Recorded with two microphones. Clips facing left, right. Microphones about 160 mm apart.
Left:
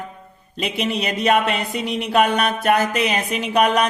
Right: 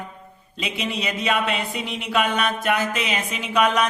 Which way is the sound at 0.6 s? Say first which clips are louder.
Left 5 dB; 55° left (ahead or behind).